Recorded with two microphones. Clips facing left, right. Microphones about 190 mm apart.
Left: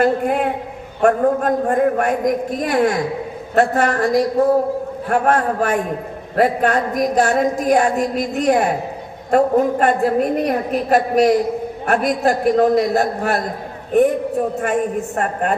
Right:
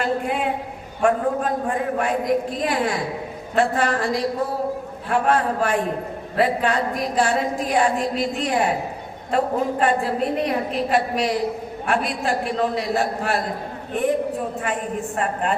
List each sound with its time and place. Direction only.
0.0 s a woman's voice: 50° left (ahead or behind)
14.6 s a woman's voice: 45° left (ahead or behind)